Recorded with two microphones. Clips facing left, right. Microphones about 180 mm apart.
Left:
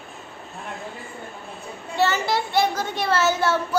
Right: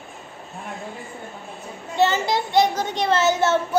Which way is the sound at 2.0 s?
20° right (ahead or behind).